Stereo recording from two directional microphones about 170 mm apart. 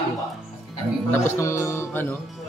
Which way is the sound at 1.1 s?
15° left (ahead or behind).